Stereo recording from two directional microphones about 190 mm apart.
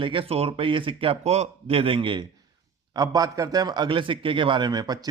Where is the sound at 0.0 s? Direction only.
25° right (ahead or behind).